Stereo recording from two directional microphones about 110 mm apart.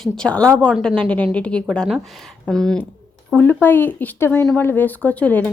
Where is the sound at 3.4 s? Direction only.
15° left (ahead or behind).